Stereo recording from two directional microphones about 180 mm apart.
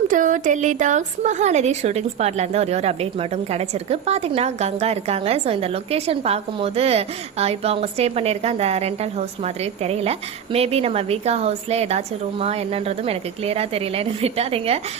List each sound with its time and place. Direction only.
0.1 s a woman's voice: 45° right (ahead or behind)